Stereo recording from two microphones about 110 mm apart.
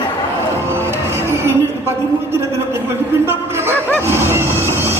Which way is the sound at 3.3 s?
25° right (ahead or behind).